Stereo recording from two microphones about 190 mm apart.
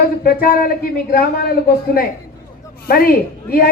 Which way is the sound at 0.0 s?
50° left (ahead or behind).